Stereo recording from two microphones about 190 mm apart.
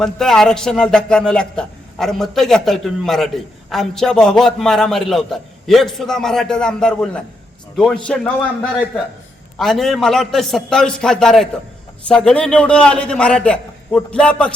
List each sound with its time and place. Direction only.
0.0 s a man's voice: centre (ahead or behind)
9.6 s a man's voice: centre (ahead or behind)